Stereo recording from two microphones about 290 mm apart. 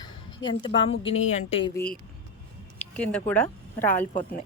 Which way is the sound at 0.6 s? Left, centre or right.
Centre.